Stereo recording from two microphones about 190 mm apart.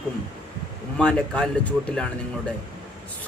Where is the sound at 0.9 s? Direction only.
5° left (ahead or behind).